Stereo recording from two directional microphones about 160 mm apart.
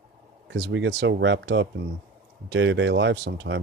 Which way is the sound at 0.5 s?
90° right.